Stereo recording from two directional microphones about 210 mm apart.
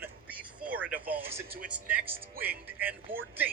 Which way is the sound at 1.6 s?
5° right (ahead or behind).